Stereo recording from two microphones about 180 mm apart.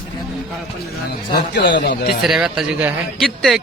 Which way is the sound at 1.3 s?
70° left (ahead or behind).